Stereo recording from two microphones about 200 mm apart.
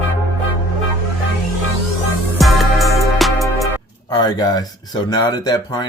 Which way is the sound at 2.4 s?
Centre (ahead or behind).